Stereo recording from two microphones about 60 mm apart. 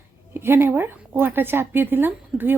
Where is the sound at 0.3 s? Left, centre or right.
Right.